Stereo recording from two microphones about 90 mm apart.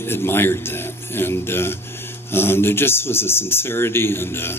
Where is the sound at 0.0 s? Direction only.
25° left (ahead or behind).